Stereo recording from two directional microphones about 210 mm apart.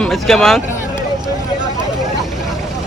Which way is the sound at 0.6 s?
35° left (ahead or behind).